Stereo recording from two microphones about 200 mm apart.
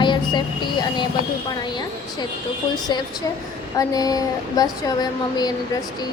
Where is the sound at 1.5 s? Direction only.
20° left (ahead or behind).